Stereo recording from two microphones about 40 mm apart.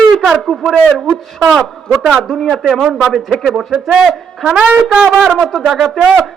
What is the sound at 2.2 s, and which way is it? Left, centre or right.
Speech, centre.